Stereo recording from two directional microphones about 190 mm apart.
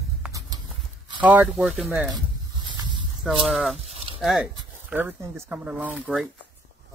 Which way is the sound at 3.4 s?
Centre (ahead or behind).